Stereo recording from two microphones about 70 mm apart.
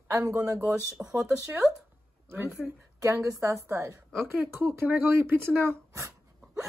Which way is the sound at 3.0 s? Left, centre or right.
Right.